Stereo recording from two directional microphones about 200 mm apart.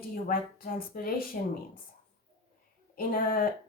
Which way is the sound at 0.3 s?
50° left (ahead or behind).